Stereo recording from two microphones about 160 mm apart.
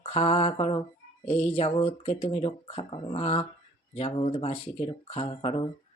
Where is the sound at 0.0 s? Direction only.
40° left (ahead or behind).